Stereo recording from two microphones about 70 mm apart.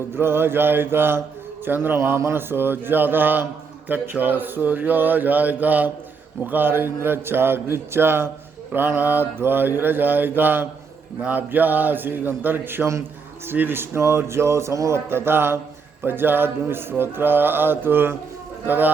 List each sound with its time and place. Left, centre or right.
0.1 s speech: right